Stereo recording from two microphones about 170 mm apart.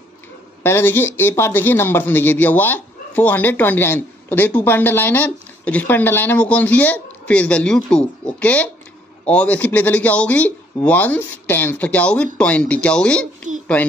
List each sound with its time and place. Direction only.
0.7 s a man's voice: 15° left (ahead or behind)